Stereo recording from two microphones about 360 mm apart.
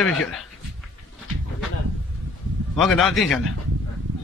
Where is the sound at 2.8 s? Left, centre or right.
Centre.